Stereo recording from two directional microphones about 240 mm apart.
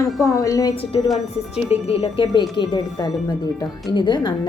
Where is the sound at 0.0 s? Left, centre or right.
Centre.